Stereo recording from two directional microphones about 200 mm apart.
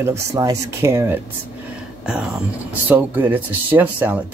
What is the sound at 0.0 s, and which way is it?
Speech, 15° right (ahead or behind).